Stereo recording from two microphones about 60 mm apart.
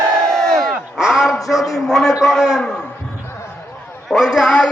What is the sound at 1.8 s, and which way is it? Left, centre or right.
Speech, centre.